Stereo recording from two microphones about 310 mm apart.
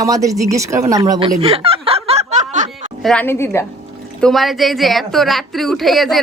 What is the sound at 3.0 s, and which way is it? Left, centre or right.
A woman's voice, centre.